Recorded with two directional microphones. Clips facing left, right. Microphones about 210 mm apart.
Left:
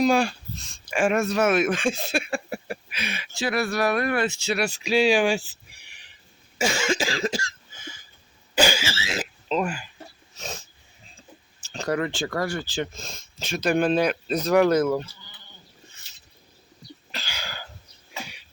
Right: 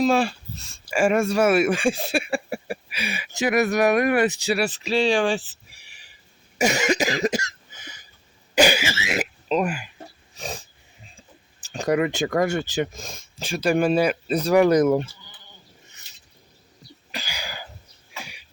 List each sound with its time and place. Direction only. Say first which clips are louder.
0.0 s speech: right 1 dB; centre (ahead or behind)
6.6 s cough: right 3 dB; 20° right (ahead or behind)
8.6 s speech: right 3 dB; 15° right (ahead or behind)
10.3 s dog: right 3 dB; 15° right (ahead or behind)
11.7 s speech: right 4 dB; 15° right (ahead or behind)
17.1 s cough: right 3 dB; 15° right (ahead or behind)